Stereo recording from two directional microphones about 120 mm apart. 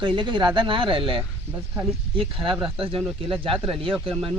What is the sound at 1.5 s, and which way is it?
Speech, 20° right (ahead or behind).